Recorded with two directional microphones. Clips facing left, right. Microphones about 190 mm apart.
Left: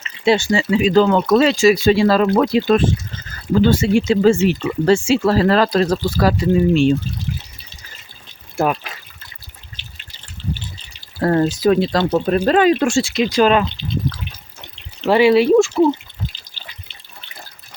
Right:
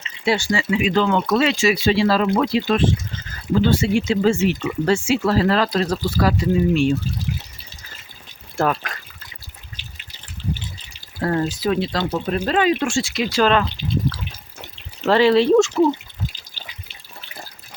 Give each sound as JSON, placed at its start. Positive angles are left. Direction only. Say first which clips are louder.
{"t": 0.3, "sound": "speech", "louder": "left 5 dB", "side_deg": 25}
{"t": 8.5, "sound": "speech", "louder": "left 2 dB", "side_deg": 10}
{"t": 11.2, "sound": "speech", "louder": "left 5 dB", "side_deg": 45}
{"t": 13.0, "sound": "speech", "louder": "left 4 dB", "side_deg": 25}
{"t": 15.0, "sound": "speech", "louder": "left 2 dB", "side_deg": 10}